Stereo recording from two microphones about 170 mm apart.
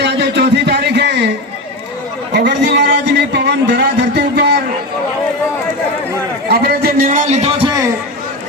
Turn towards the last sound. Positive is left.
turn(degrees=-35)  # may be behind; listen again after turning